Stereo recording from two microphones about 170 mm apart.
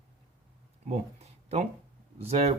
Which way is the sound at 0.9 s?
40° right (ahead or behind).